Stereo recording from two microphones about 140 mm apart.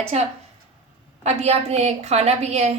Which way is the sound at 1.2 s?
50° right (ahead or behind).